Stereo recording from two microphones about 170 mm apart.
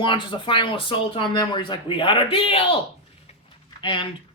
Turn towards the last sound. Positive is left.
turn(degrees=30)  # may be behind; listen again after turning